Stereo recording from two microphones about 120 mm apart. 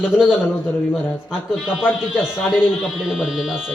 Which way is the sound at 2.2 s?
5° right (ahead or behind).